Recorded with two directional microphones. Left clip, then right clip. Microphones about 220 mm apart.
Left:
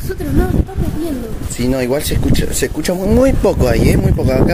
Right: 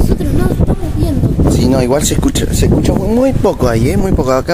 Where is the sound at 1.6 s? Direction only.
15° right (ahead or behind).